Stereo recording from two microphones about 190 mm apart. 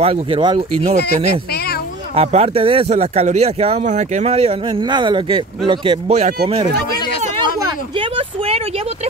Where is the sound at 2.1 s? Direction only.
30° right (ahead or behind).